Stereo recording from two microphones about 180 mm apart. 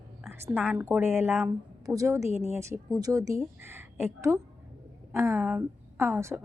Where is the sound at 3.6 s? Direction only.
10° right (ahead or behind).